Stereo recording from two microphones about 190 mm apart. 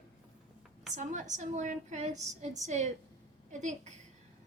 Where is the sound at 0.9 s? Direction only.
40° right (ahead or behind).